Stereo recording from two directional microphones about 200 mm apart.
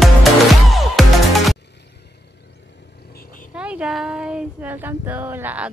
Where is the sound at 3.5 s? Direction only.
5° right (ahead or behind).